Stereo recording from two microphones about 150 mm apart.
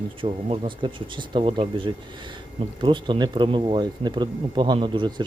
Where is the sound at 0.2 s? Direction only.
35° right (ahead or behind).